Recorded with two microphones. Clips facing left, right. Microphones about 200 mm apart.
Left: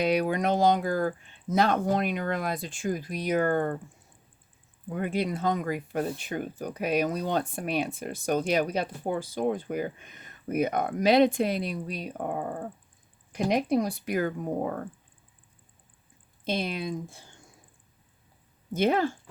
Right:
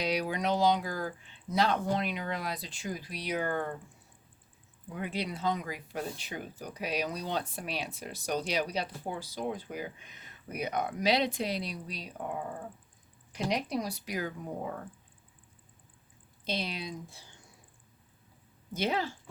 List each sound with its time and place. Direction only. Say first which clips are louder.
0.0 s speech: left 6 dB; 55° left (ahead or behind)
4.9 s speech: left 7 dB; 50° left (ahead or behind)
16.4 s speech: left 6 dB; 50° left (ahead or behind)
18.7 s speech: left 7 dB; 50° left (ahead or behind)